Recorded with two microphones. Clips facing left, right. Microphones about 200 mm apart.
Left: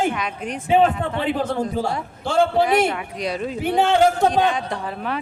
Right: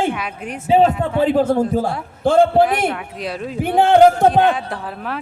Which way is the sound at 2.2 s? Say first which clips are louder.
Right 7 dB; 55° right (ahead or behind).